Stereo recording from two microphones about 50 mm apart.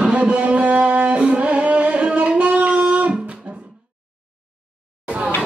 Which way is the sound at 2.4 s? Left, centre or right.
Right.